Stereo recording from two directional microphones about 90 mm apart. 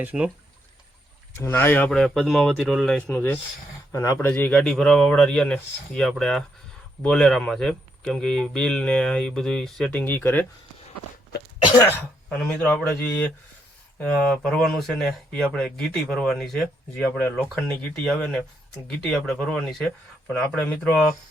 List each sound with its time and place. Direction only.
0.0 s speech: 15° right (ahead or behind)
1.5 s speech: 25° left (ahead or behind)
1.9 s speech: 5° left (ahead or behind)
3.9 s speech: 30° left (ahead or behind)
4.3 s a man's voice: 15° left (ahead or behind)
12.6 s speech: 30° left (ahead or behind)
13.1 s a man's voice: 15° left (ahead or behind)
17.0 s speech: 20° left (ahead or behind)
17.3 s a man's voice: 10° left (ahead or behind)